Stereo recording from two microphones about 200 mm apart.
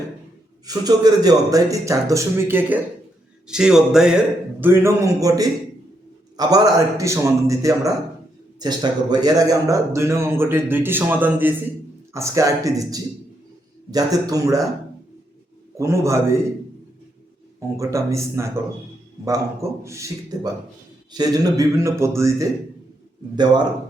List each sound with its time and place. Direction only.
0.6 s a man's voice: 20° right (ahead or behind)
15.8 s a man's voice: 15° right (ahead or behind)
17.6 s a man's voice: 15° right (ahead or behind)
19.8 s a man's voice: 15° right (ahead or behind)